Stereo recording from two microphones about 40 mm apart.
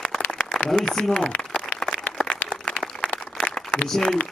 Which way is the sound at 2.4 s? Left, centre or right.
Left.